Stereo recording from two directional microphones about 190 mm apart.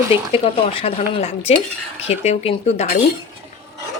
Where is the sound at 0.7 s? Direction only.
30° left (ahead or behind).